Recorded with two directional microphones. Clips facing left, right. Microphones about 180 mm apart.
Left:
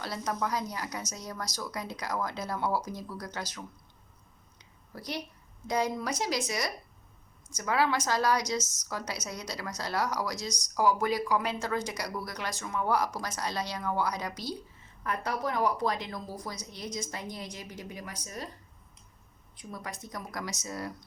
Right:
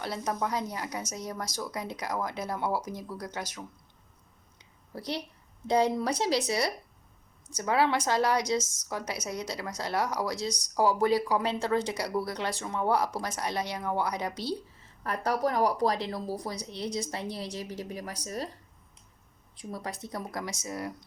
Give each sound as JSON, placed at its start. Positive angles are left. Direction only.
{"t": 0.0, "sound": "speech", "side_deg": -25}
{"t": 4.5, "sound": "a sound", "side_deg": -30}
{"t": 5.6, "sound": "speech", "side_deg": -30}
{"t": 8.6, "sound": "a woman's voice", "side_deg": -50}
{"t": 8.9, "sound": "speech", "side_deg": -20}
{"t": 15.0, "sound": "speech", "side_deg": -40}
{"t": 19.5, "sound": "speech", "side_deg": -35}